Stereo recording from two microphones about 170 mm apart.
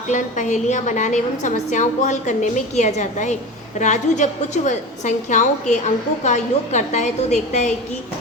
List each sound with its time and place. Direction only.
0.1 s a woman's voice: 45° left (ahead or behind)